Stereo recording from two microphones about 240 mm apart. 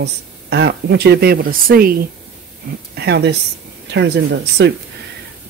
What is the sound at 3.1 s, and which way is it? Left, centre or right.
Speech, right.